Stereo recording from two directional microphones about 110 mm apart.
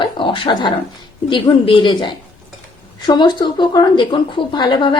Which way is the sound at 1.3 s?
50° left (ahead or behind).